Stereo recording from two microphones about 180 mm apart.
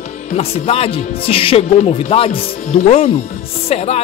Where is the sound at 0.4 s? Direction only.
35° left (ahead or behind).